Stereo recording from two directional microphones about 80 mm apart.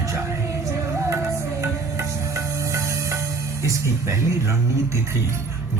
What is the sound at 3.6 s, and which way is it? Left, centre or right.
Speech, right.